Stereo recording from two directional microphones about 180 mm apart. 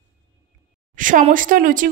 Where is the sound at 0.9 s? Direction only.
45° right (ahead or behind).